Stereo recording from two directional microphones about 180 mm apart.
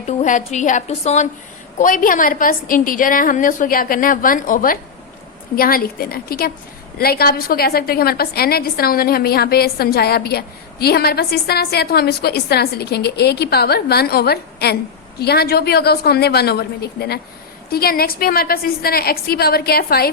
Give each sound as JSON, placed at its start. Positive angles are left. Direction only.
{"t": 0.2, "sound": "a woman's voice", "side_deg": 45}